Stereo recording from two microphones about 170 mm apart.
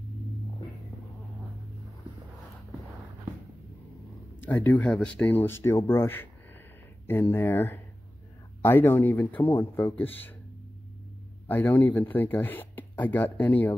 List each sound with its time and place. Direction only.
4.4 s speech: 10° left (ahead or behind)
11.4 s speech: 10° left (ahead or behind)